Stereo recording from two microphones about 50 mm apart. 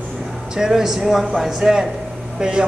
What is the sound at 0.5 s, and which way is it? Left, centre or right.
Speech, centre.